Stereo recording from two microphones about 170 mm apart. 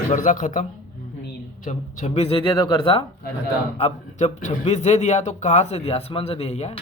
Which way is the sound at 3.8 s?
45° left (ahead or behind).